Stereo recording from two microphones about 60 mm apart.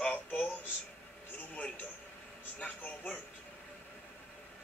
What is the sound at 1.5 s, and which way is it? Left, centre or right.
A man's voice, left.